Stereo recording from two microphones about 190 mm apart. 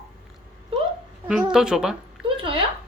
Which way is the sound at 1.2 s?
5° right (ahead or behind).